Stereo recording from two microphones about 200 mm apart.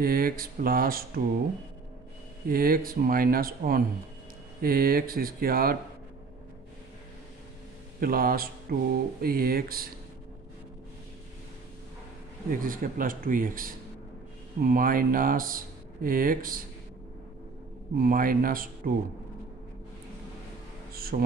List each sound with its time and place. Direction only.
0.0 s speech: 45° right (ahead or behind)
2.4 s speech: 45° right (ahead or behind)
8.0 s speech: 45° right (ahead or behind)
12.4 s speech: 45° right (ahead or behind)
17.9 s speech: 45° right (ahead or behind)
20.9 s speech: 50° right (ahead or behind)